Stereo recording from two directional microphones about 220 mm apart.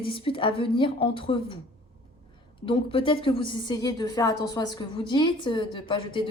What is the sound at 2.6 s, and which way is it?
A woman's voice, 25° left (ahead or behind).